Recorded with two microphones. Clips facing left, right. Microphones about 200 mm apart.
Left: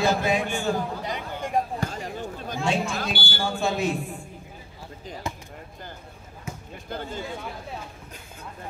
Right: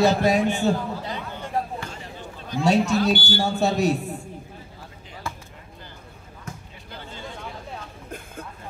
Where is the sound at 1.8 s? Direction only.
40° left (ahead or behind).